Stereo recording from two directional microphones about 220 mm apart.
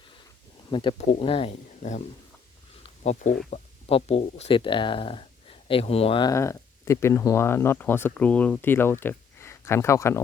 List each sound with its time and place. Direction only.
0.7 s speech: 20° left (ahead or behind)